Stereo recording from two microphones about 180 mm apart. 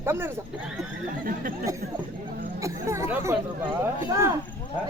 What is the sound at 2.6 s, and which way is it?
Chatter, 15° right (ahead or behind).